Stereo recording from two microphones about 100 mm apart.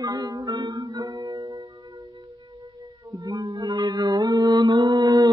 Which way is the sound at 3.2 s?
35° right (ahead or behind).